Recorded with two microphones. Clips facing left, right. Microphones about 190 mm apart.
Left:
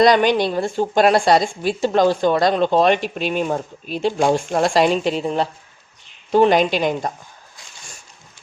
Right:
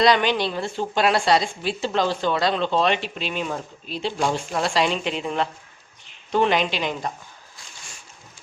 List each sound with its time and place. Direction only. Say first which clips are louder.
0.0 s a woman's voice: left 5 dB; 45° left (ahead or behind)